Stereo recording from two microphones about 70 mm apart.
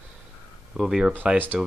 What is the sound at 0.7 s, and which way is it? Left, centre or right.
Speech, centre.